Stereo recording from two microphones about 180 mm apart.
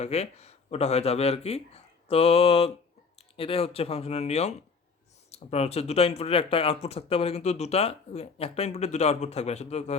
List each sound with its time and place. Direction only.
0.0 s speech: 35° left (ahead or behind)